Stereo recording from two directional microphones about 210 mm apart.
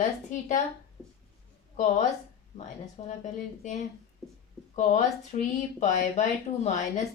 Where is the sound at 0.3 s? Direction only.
35° left (ahead or behind).